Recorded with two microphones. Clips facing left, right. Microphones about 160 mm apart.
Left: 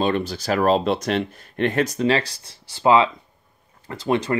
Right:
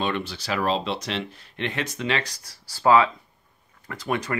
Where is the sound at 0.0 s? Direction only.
40° left (ahead or behind).